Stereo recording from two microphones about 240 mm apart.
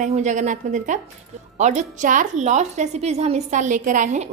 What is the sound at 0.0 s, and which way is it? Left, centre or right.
A woman's voice, right.